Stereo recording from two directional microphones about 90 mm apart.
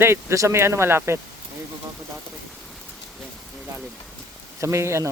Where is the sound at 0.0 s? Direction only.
30° right (ahead or behind).